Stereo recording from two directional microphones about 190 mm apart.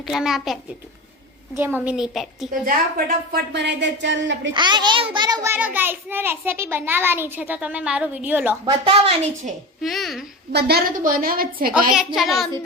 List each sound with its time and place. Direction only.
0.1 s a child's voice: centre (ahead or behind)
3.3 s speech: 65° right (ahead or behind)
4.5 s a child's voice: 25° right (ahead or behind)
8.6 s a woman's voice: 30° right (ahead or behind)
9.8 s a child's voice: centre (ahead or behind)
10.5 s a woman's voice: 55° right (ahead or behind)
11.9 s a child's voice: centre (ahead or behind)